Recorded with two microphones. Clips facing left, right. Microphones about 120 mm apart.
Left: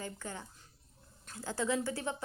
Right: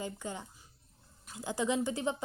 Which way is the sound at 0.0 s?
15° right (ahead or behind).